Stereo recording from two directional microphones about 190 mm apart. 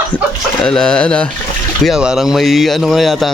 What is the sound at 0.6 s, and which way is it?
Speech, 5° left (ahead or behind).